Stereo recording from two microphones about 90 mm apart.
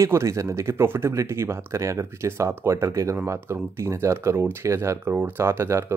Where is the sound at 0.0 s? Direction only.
30° right (ahead or behind).